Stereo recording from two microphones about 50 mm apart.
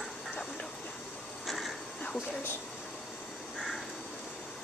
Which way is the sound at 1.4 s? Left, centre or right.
Centre.